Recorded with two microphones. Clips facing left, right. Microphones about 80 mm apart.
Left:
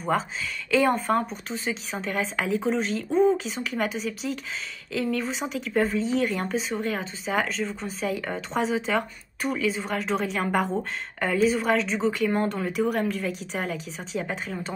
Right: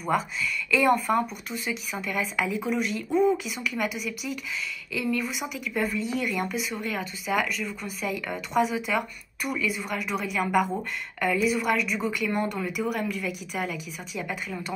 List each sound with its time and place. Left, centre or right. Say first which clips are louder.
0.7 s speech: even; left
4.9 s speech: left 1 dB; left
5.2 s speech: left 2 dB; left